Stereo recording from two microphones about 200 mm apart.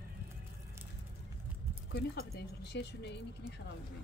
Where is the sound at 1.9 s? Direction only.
55° left (ahead or behind).